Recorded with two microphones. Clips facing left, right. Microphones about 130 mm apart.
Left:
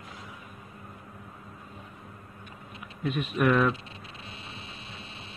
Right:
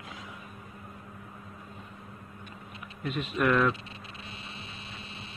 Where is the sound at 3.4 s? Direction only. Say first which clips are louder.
Left 1 dB; 15° left (ahead or behind).